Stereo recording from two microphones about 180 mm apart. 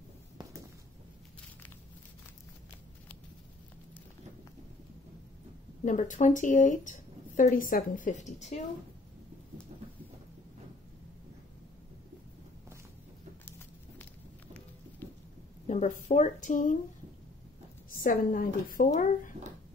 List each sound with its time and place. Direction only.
0.4 s a sound: 20° right (ahead or behind)
5.9 s speech: 45° left (ahead or behind)
15.6 s speech: 40° left (ahead or behind)
18.0 s speech: 50° left (ahead or behind)